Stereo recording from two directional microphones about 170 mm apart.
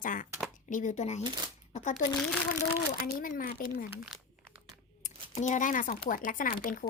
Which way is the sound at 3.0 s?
55° left (ahead or behind).